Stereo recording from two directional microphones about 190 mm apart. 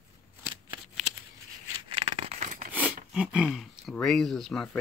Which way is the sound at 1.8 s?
25° right (ahead or behind).